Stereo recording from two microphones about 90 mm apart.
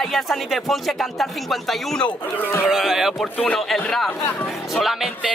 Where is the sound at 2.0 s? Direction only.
20° left (ahead or behind).